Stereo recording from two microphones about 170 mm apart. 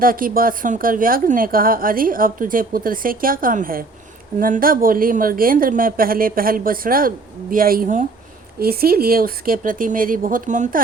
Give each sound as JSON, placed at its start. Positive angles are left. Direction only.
{"t": 0.0, "sound": "a woman's voice", "side_deg": -55}